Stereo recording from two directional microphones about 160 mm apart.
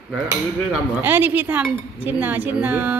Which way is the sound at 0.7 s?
10° right (ahead or behind).